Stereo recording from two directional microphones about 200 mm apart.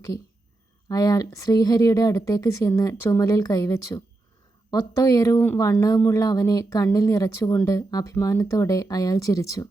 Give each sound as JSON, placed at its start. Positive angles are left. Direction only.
{"t": 0.9, "sound": "speech", "side_deg": 20}